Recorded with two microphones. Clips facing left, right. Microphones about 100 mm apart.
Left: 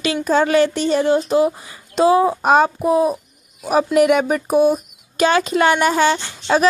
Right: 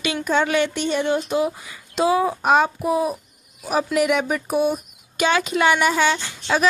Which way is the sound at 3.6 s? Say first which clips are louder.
Left 6 dB; 45° left (ahead or behind).